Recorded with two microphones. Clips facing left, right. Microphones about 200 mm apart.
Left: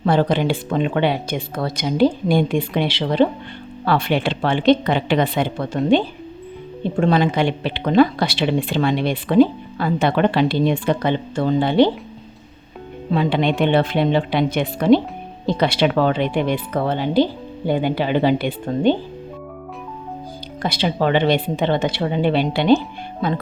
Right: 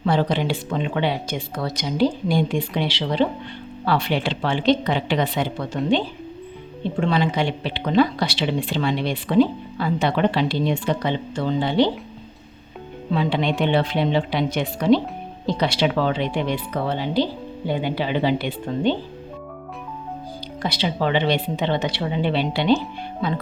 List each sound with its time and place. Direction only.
0.0 s a woman's voice: 50° left (ahead or behind)
7.0 s speech: 50° left (ahead or behind)
13.1 s a woman's voice: 55° left (ahead or behind)
20.6 s speech: 50° left (ahead or behind)